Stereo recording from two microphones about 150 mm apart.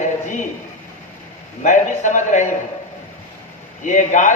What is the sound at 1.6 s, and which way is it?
Speech, 55° left (ahead or behind).